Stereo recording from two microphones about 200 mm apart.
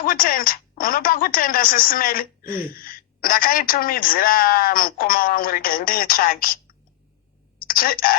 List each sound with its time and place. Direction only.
0.0 s a woman's voice: 45° left (ahead or behind)